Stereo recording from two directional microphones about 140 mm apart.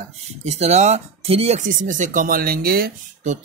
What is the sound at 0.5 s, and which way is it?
Speech, 50° right (ahead or behind).